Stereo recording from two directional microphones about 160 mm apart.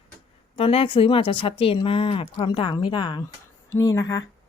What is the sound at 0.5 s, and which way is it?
Speech, 35° left (ahead or behind).